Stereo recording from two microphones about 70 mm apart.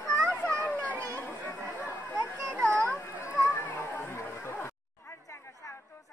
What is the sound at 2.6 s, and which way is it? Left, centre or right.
Children playing, centre.